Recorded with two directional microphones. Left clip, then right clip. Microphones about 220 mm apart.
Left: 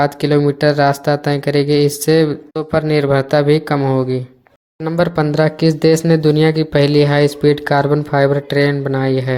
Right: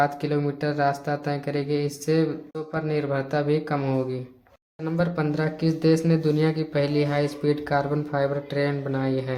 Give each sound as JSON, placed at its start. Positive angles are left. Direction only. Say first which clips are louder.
{"t": 0.0, "sound": "speech", "louder": "left 10 dB", "side_deg": 35}